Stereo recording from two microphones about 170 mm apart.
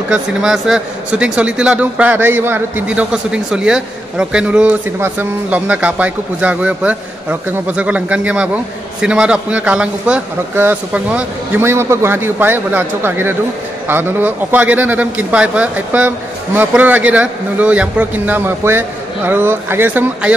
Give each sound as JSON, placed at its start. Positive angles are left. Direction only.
{"t": 0.1, "sound": "speech", "side_deg": -5}